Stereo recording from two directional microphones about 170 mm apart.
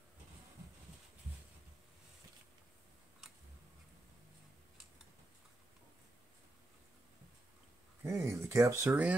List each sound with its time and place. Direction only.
8.0 s speech: 15° right (ahead or behind)